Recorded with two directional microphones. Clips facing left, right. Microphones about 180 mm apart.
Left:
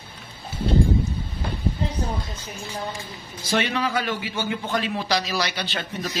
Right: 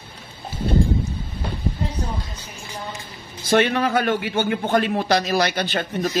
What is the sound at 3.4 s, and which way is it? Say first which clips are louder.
A man's voice: right 6 dB; 55° right (ahead or behind).